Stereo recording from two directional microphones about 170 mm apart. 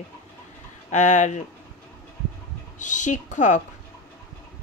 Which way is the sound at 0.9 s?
45° left (ahead or behind).